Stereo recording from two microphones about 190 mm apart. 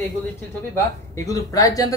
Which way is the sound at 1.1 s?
15° left (ahead or behind).